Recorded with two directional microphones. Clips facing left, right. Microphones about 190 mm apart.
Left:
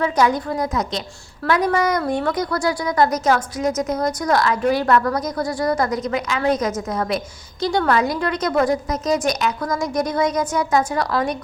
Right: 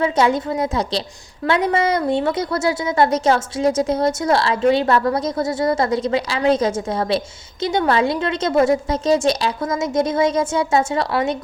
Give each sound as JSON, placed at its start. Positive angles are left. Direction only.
{"t": 0.0, "sound": "a woman's voice", "side_deg": -25}